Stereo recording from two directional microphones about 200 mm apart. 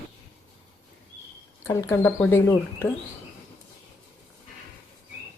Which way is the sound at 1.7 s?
10° left (ahead or behind).